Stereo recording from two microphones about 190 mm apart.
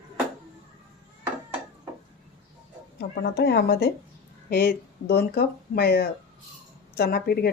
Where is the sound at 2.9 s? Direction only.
60° left (ahead or behind).